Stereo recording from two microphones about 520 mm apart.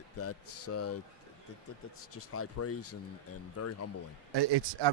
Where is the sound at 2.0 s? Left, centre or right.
Left.